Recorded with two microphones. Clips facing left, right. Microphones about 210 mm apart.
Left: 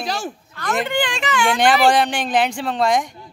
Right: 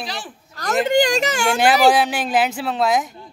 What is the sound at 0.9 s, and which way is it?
Speech, 40° right (ahead or behind).